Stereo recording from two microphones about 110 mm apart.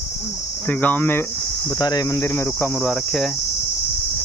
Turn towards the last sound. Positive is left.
turn(degrees=5)  # may be behind; listen again after turning